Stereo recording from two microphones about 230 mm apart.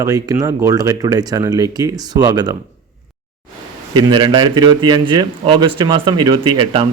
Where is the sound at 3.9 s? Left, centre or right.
Centre.